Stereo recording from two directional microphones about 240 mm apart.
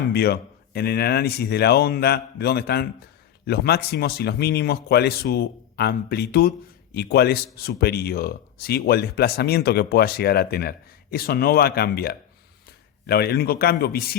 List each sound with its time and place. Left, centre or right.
0.1 s speech: left